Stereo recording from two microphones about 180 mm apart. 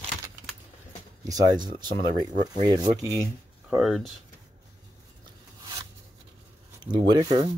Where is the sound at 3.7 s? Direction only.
Centre (ahead or behind).